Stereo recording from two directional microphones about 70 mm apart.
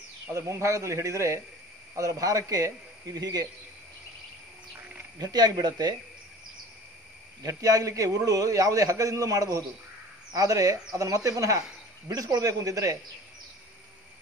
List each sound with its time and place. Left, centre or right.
0.3 s a man's voice: right
2.0 s a man's voice: right
4.7 s a sound: right
5.2 s speech: right
7.4 s a man's voice: right